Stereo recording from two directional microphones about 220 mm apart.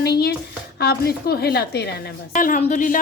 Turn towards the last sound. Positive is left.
turn(degrees=35)  # may be behind; listen again after turning